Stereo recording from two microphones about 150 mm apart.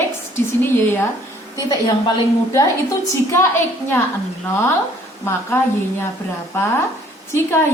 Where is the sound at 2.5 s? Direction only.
20° left (ahead or behind).